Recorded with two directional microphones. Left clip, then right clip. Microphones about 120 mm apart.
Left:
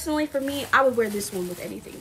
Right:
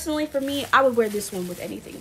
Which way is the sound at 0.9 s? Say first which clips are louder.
Right 2 dB; 35° right (ahead or behind).